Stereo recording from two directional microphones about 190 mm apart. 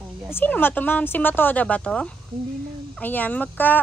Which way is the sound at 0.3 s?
10° left (ahead or behind).